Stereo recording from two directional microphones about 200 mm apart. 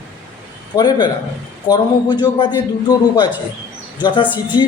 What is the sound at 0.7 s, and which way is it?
A man's voice, 20° left (ahead or behind).